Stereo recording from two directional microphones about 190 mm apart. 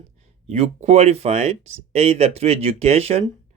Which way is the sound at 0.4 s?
30° right (ahead or behind).